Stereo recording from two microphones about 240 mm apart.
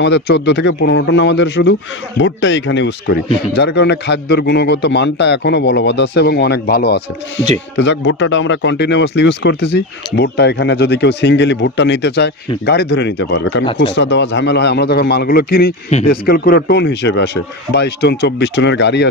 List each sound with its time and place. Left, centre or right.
0.0 s a man's voice: left